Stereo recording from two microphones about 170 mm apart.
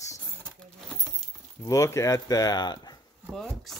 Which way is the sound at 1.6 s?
20° left (ahead or behind).